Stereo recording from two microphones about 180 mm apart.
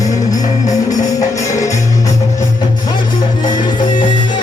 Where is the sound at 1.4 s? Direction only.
20° left (ahead or behind).